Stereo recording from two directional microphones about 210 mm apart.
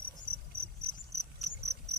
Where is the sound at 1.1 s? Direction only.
50° right (ahead or behind).